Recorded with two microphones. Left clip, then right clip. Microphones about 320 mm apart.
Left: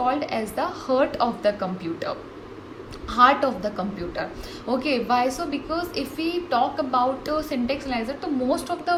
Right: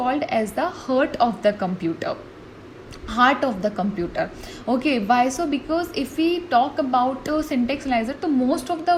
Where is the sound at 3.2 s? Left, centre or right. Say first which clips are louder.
Left 1 dB; centre.